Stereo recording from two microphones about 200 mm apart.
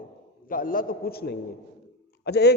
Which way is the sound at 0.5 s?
45° left (ahead or behind).